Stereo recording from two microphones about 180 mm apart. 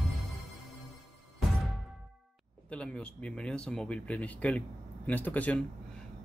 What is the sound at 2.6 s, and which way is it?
Speech, 5° left (ahead or behind).